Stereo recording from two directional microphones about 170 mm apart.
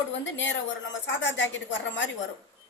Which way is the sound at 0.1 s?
90° left.